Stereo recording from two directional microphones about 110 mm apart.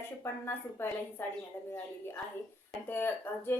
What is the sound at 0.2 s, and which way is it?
Speech, 20° left (ahead or behind).